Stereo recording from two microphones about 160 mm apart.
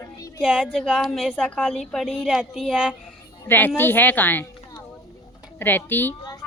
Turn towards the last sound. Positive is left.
turn(degrees=10)  # may be behind; listen again after turning